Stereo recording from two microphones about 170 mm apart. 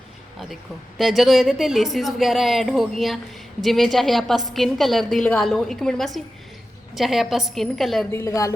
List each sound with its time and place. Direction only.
0.9 s a woman's voice: centre (ahead or behind)
8.1 s speech: 20° left (ahead or behind)